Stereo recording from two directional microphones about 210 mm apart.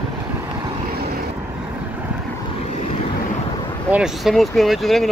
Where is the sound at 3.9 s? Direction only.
Centre (ahead or behind).